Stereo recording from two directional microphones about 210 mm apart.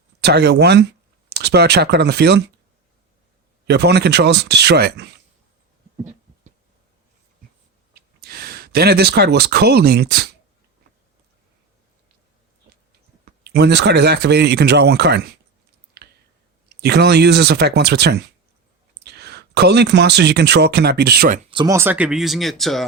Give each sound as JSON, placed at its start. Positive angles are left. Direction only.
{"t": 0.2, "sound": "speech", "side_deg": -50}
{"t": 3.7, "sound": "speech", "side_deg": -50}
{"t": 7.9, "sound": "speech", "side_deg": -50}
{"t": 13.4, "sound": "speech", "side_deg": -50}
{"t": 16.8, "sound": "speech", "side_deg": -50}
{"t": 21.5, "sound": "speech", "side_deg": -20}